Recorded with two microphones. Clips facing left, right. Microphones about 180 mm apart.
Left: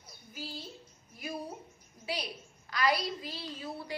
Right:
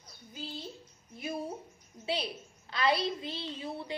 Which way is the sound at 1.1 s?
25° right (ahead or behind).